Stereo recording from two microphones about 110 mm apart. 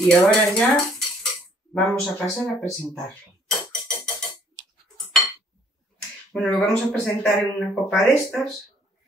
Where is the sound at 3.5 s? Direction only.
5° left (ahead or behind).